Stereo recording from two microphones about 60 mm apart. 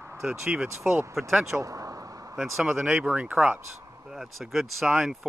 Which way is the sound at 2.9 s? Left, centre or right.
Centre.